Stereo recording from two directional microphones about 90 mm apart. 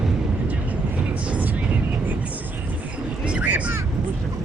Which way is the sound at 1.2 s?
15° right (ahead or behind).